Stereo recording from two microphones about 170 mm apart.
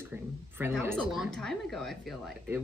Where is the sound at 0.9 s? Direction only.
Centre (ahead or behind).